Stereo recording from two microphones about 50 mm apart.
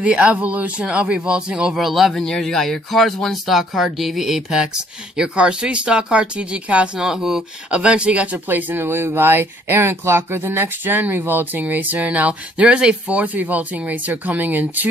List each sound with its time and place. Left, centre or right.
0.0 s speech: right
1.8 s speech: centre; by 7.1 s right
7.1 s speech: centre
7.7 s speech: right
8.5 s speech: right
12.2 s speech: right
13.2 s speech: right